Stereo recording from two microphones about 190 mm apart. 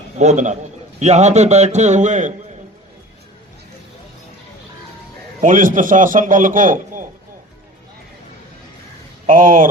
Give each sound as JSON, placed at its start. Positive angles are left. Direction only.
{"t": 0.2, "sound": "a man's voice", "side_deg": -40}
{"t": 5.4, "sound": "a man's voice", "side_deg": -45}
{"t": 9.2, "sound": "a man's voice", "side_deg": -45}